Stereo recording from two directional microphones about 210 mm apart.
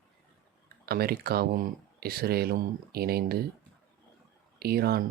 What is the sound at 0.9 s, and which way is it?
Speech, 50° right (ahead or behind).